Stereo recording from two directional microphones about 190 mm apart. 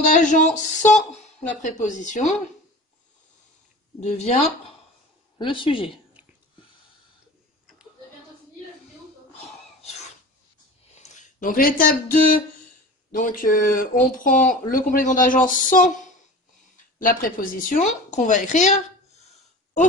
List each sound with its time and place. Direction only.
0.0 s a woman's voice: 40° left (ahead or behind)
4.0 s a woman's voice: 35° left (ahead or behind)
11.0 s speech: 40° left (ahead or behind)
17.0 s a woman's voice: 45° left (ahead or behind)